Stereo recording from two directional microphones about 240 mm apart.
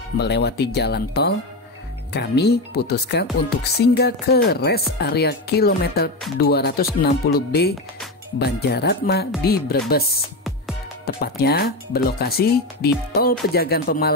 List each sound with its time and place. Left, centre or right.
0.2 s speech: left
11.1 s speech: left